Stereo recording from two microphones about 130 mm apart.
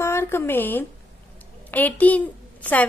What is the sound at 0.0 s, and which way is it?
A woman's voice, 20° left (ahead or behind).